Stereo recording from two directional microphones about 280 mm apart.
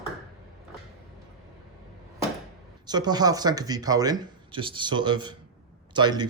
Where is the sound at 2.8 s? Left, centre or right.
Centre.